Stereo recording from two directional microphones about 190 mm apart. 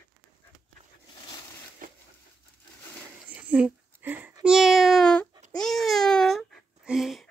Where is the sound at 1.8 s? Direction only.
45° right (ahead or behind).